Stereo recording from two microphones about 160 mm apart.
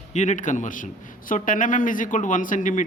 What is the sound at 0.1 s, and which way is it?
A man's voice, 50° left (ahead or behind).